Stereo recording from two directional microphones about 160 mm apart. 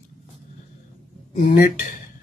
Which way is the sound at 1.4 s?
60° left (ahead or behind).